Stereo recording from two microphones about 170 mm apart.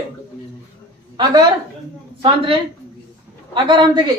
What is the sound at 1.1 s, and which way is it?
A woman's voice, 25° right (ahead or behind).